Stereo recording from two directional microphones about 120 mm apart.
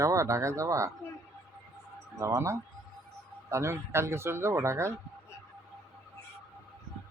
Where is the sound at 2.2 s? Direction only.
25° right (ahead or behind).